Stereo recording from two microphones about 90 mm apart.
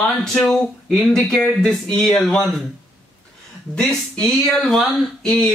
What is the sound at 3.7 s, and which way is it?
Speech, 10° left (ahead or behind).